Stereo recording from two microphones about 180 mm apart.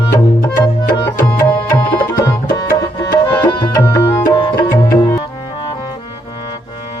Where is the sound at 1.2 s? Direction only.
25° left (ahead or behind).